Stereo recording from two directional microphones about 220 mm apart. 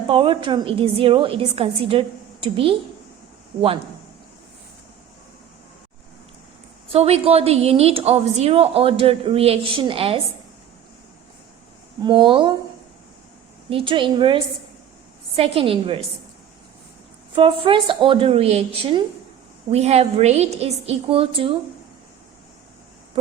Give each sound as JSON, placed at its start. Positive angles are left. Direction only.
{"t": 0.1, "sound": "a woman's voice", "side_deg": -20}
{"t": 6.9, "sound": "a woman's voice", "side_deg": -25}
{"t": 12.0, "sound": "a woman's voice", "side_deg": -20}
{"t": 13.7, "sound": "a woman's voice", "side_deg": -25}
{"t": 17.3, "sound": "a woman's voice", "side_deg": -25}